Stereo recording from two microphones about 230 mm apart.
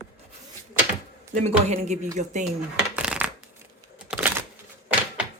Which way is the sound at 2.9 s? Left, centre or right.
Centre.